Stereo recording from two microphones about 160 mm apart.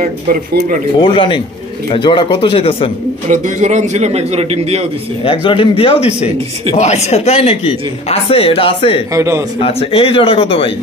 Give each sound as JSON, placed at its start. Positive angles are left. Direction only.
{"t": 0.0, "sound": "speech", "side_deg": -60}
{"t": 0.9, "sound": "speech", "side_deg": 30}
{"t": 3.3, "sound": "a man's voice", "side_deg": -50}
{"t": 5.2, "sound": "speech", "side_deg": 35}
{"t": 9.1, "sound": "a man's voice", "side_deg": -20}
{"t": 9.6, "sound": "speech", "side_deg": 35}